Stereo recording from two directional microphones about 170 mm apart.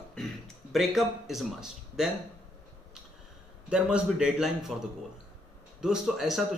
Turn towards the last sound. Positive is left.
turn(degrees=0)  # may be behind; listen again after turning